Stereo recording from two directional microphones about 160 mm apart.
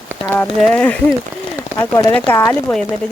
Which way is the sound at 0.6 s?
10° left (ahead or behind).